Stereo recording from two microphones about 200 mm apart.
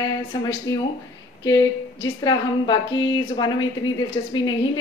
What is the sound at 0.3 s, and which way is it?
Speech, 20° left (ahead or behind).